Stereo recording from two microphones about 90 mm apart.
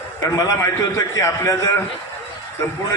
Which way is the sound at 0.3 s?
40° left (ahead or behind).